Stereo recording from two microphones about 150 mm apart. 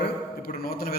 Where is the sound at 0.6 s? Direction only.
75° left (ahead or behind).